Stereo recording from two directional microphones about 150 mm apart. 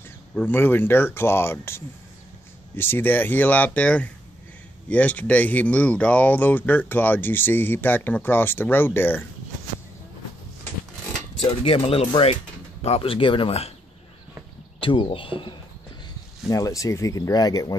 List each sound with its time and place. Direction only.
0.3 s speech: 15° left (ahead or behind)
11.6 s speech: 35° left (ahead or behind)
14.8 s speech: 35° left (ahead or behind)
16.4 s speech: 20° left (ahead or behind)